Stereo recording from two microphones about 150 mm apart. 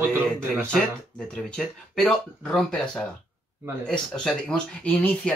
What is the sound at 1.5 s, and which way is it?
Speech, 5° left (ahead or behind).